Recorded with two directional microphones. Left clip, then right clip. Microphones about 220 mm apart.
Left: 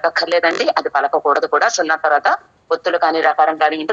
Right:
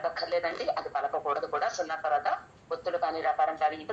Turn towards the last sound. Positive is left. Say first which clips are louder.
# left 13 dB
turn(degrees=40)  # may be behind; listen again after turning